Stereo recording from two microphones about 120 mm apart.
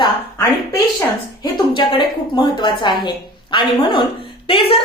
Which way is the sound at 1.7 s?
40° left (ahead or behind).